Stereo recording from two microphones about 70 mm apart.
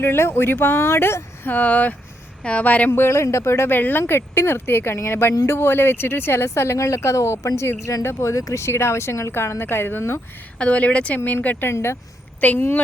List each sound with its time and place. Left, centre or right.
0.0 s speech: left
2.9 s speech: left
10.6 s speech: centre
11.7 s speech: left
12.4 s speech: left